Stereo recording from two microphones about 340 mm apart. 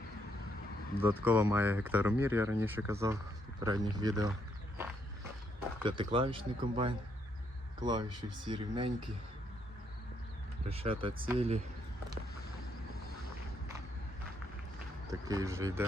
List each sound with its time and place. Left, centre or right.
0.9 s speech: centre
1.2 s speech: centre
5.8 s speech: centre
10.7 s speech: centre
15.1 s speech: centre